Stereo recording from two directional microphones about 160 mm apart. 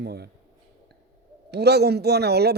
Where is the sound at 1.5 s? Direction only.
90° right.